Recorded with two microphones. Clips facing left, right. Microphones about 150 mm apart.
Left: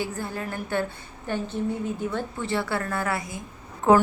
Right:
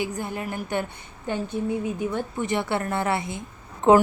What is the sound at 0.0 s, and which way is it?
A woman's voice, 15° right (ahead or behind).